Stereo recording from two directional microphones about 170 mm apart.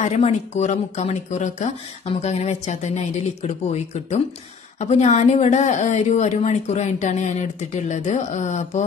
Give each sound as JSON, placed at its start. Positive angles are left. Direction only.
{"t": 0.0, "sound": "a woman's voice", "side_deg": 40}